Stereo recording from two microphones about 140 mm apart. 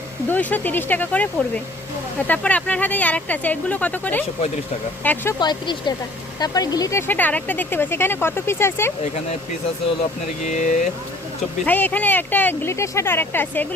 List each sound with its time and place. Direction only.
0.3 s speech: 10° left (ahead or behind)
5.4 s speech: 30° left (ahead or behind)
7.1 s speech: 10° left (ahead or behind)
10.4 s speech: 60° left (ahead or behind)
11.6 s speech: 10° left (ahead or behind)